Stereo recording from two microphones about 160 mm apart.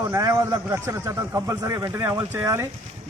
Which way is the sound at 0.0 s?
20° right (ahead or behind).